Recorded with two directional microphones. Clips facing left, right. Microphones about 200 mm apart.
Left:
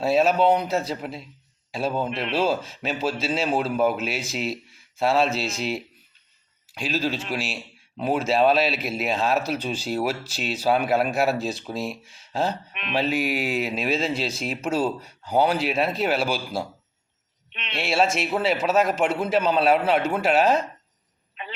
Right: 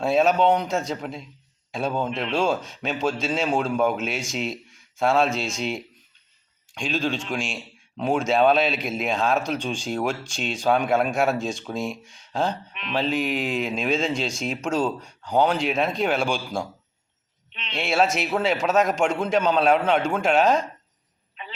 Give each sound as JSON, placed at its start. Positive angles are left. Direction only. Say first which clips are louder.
{"t": 0.0, "sound": "a man's voice", "louder": "even", "side_deg": 0}
{"t": 17.5, "sound": "a sound", "louder": "left 1 dB", "side_deg": 60}
{"t": 17.7, "sound": "a man's voice", "louder": "even", "side_deg": 0}